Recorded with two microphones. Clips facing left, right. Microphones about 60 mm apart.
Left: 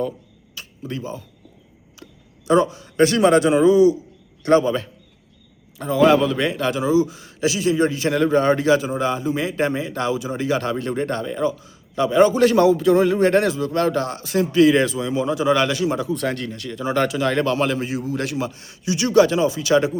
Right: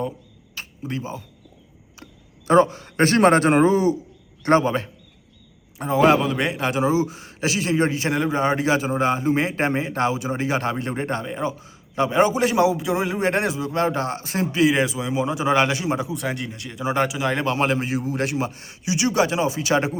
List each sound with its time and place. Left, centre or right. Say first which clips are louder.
0.5 s a sound: right 1 dB; right
2.5 s a man's voice: right 1 dB; right
12.3 s a man's voice: left 4 dB; centre
14.6 s a man's voice: left 4 dB; centre
16.1 s a man's voice: left 3 dB; centre; by 20.0 s right